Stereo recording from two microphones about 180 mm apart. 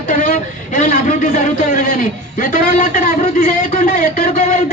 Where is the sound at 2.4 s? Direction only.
50° left (ahead or behind).